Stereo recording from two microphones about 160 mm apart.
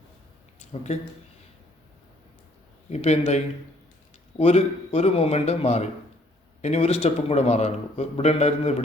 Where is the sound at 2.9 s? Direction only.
45° left (ahead or behind).